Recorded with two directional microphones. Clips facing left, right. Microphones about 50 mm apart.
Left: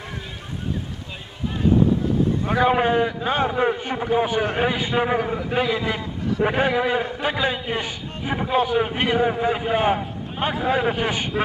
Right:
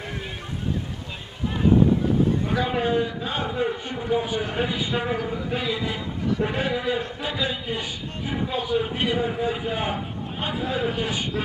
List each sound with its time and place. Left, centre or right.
2.6 s a man's voice: left
3.8 s a man's voice: left
5.6 s a man's voice: left
6.7 s a man's voice: left
7.2 s a man's voice: left